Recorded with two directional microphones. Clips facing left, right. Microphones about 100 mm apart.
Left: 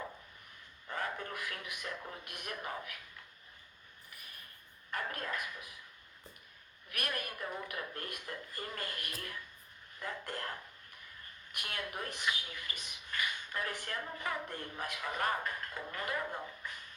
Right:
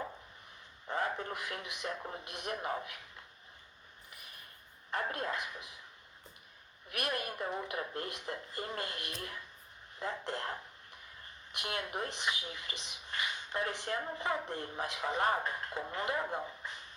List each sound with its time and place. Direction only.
0.9 s speech: 25° right (ahead or behind)
4.9 s speech: 25° right (ahead or behind)
6.9 s speech: 25° right (ahead or behind)
11.5 s speech: 25° right (ahead or behind)